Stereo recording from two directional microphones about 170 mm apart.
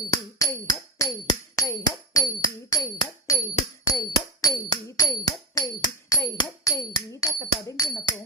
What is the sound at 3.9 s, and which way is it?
Music, 20° left (ahead or behind).